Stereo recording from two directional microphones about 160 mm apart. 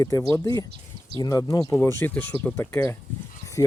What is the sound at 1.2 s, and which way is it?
Speech, 20° left (ahead or behind).